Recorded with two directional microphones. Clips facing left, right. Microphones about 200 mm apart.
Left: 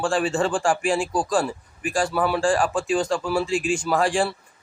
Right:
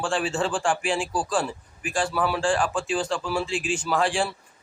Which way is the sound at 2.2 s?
40° left (ahead or behind).